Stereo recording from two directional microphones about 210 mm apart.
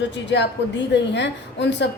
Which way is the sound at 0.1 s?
55° left (ahead or behind).